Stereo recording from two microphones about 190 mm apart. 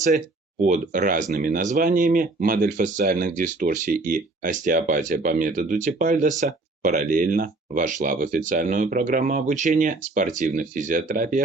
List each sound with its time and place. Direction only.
0.6 s speech: 40° right (ahead or behind)